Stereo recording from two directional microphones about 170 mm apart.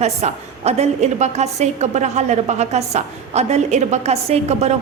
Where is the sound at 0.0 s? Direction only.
40° right (ahead or behind).